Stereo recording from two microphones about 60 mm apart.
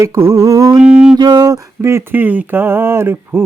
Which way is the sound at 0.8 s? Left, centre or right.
Right.